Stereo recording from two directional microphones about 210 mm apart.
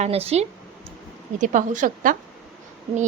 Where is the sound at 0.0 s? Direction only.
30° right (ahead or behind).